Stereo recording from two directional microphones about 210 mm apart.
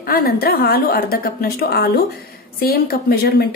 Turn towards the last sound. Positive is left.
turn(degrees=45)  # may be behind; listen again after turning